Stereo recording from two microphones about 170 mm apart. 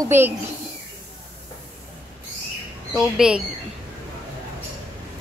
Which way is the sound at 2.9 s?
5° right (ahead or behind).